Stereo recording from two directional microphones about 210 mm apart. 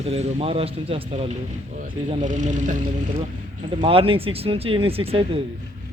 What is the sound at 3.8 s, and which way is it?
Speech, 25° right (ahead or behind).